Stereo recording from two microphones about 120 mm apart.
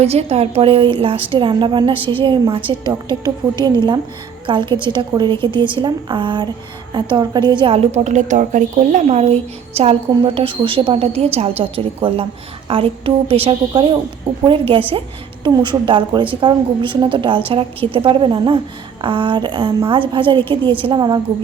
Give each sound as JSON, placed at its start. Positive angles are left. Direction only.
{"t": 0.0, "sound": "a woman's voice", "side_deg": -60}